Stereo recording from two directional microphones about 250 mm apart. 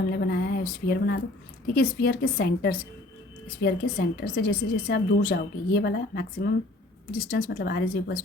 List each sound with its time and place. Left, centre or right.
0.1 s a woman's voice: left